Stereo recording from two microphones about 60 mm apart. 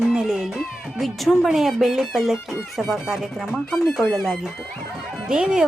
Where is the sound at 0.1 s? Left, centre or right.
Centre.